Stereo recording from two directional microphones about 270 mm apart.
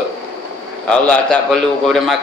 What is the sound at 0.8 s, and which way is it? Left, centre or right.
A man's voice, centre.